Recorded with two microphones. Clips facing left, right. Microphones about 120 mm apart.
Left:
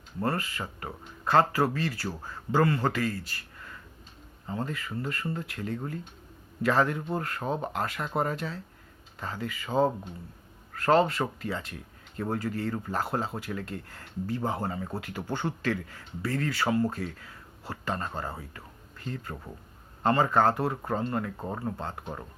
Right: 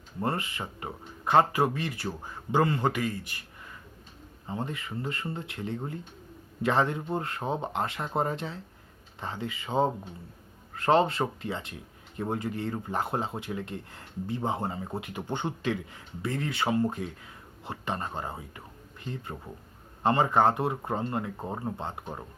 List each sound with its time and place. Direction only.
0.2 s speech: 20° right (ahead or behind)